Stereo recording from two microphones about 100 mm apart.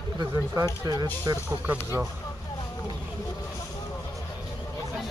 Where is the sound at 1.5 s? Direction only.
15° right (ahead or behind).